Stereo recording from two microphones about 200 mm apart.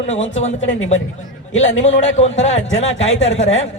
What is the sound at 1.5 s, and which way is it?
Speech, 70° left (ahead or behind).